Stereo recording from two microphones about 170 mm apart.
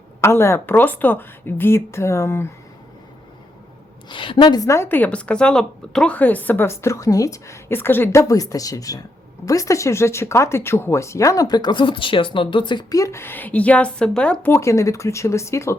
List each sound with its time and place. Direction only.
0.2 s speech: 15° left (ahead or behind)
4.1 s speech: 30° left (ahead or behind)